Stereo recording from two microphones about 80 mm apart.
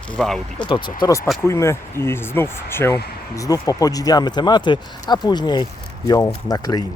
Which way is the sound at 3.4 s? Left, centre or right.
Left.